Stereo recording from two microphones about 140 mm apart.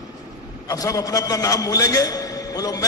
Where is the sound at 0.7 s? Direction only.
25° left (ahead or behind).